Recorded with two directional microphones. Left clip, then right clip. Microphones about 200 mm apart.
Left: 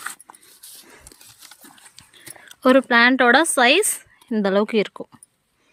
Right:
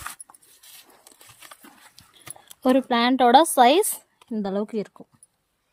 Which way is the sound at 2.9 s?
Centre (ahead or behind).